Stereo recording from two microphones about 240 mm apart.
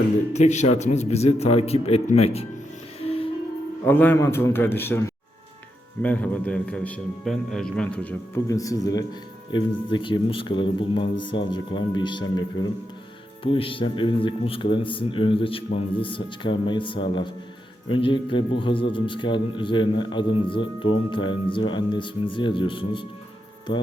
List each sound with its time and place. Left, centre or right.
0.3 s a man's voice: left
3.0 s music: left
3.8 s a man's voice: centre